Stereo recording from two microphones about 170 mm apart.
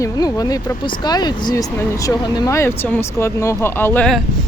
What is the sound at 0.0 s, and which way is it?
Speech, 20° left (ahead or behind).